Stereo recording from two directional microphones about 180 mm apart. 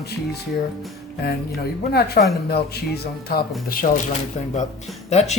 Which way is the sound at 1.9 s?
60° left (ahead or behind).